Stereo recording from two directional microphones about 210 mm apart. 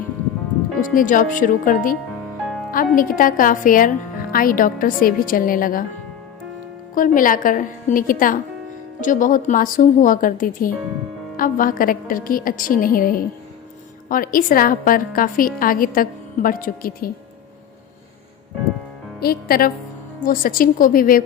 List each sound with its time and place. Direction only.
0.9 s a woman's voice: 40° left (ahead or behind)
6.9 s a woman's voice: 40° left (ahead or behind)
19.2 s a woman's voice: 45° left (ahead or behind)